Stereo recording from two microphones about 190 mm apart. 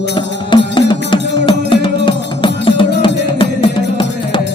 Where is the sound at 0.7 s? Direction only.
25° left (ahead or behind).